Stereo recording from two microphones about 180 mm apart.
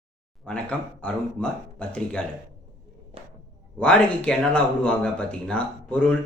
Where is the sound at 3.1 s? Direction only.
30° right (ahead or behind).